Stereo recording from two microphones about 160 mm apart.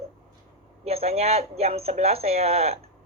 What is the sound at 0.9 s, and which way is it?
Speech, 40° right (ahead or behind).